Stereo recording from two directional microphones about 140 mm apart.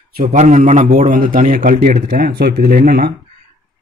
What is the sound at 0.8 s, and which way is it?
Speech, 70° right (ahead or behind).